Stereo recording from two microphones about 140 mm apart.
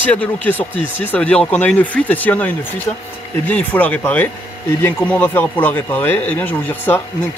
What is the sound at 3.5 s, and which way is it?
Speech, 10° left (ahead or behind).